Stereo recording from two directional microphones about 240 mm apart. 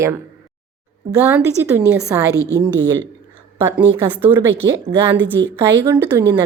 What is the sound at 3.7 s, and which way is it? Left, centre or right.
Speech, centre.